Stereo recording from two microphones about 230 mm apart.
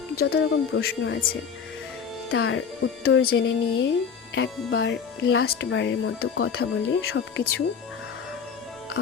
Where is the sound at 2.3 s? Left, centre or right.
Left.